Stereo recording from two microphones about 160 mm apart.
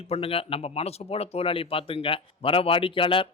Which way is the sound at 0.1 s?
35° left (ahead or behind).